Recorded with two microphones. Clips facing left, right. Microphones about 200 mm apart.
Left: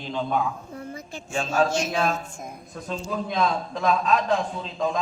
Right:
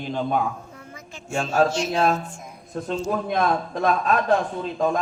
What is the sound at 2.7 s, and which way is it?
A man's voice, 60° right (ahead or behind).